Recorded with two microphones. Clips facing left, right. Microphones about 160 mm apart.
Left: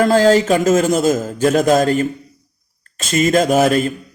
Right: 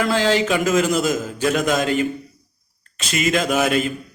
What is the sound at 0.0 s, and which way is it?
A man's voice, 40° left (ahead or behind).